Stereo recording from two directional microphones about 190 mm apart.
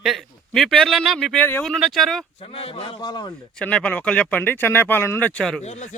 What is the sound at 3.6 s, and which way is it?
Speech, 5° left (ahead or behind).